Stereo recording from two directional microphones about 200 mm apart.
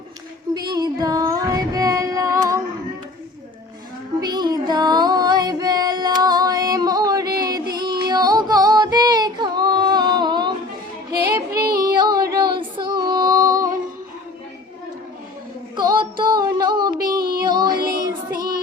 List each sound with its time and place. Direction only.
0.5 s music: 20° right (ahead or behind)
4.2 s music: 20° right (ahead or behind)
7.4 s child singing: 20° right (ahead or behind)
11.1 s music: 50° right (ahead or behind)
11.9 s female singing: 20° right (ahead or behind)
15.7 s music: 20° right (ahead or behind)
17.0 s child singing: 50° right (ahead or behind)
17.4 s music: 20° right (ahead or behind)
17.9 s child singing: 50° right (ahead or behind)